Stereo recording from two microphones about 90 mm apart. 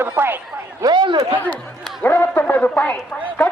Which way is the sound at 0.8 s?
55° right (ahead or behind).